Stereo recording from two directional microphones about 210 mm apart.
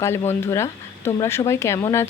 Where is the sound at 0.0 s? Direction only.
10° left (ahead or behind).